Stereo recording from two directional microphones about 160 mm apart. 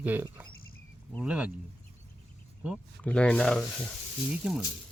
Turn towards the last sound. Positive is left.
turn(degrees=-5)  # may be behind; listen again after turning